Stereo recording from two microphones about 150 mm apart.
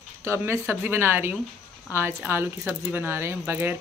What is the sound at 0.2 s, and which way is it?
Speech, 20° right (ahead or behind).